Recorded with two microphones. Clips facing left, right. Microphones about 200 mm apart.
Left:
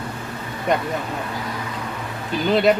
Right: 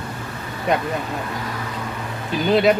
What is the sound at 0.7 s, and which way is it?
Speech, centre (ahead or behind).